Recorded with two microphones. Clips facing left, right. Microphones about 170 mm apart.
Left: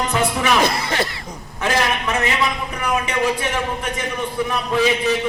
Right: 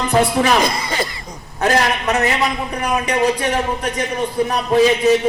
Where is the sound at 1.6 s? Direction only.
40° right (ahead or behind).